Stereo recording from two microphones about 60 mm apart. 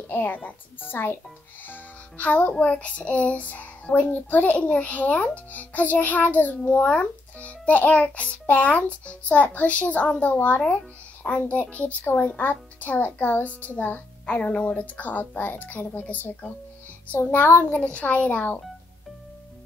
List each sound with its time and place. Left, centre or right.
0.1 s a woman's voice: left
14.2 s a child's voice: centre
17.3 s a child's voice: left